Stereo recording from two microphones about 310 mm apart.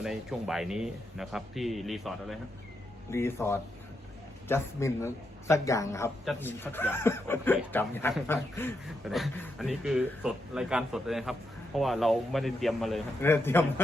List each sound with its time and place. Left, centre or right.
0.0 s a man's voice: centre